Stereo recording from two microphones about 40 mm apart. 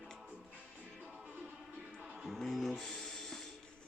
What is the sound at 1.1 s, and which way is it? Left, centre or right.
Music, centre.